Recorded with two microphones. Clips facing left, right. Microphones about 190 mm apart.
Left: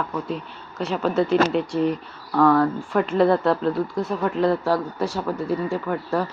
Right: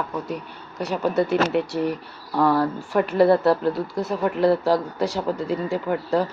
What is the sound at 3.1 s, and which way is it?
Speech, 10° right (ahead or behind).